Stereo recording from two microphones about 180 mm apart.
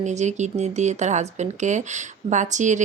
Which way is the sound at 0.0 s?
40° right (ahead or behind).